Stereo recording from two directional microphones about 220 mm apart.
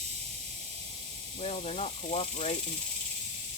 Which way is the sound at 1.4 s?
30° left (ahead or behind).